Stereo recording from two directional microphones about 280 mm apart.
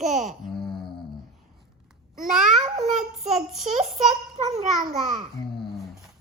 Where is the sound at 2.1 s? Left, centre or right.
Centre.